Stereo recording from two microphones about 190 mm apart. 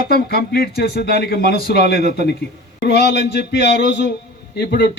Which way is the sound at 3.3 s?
65° left (ahead or behind).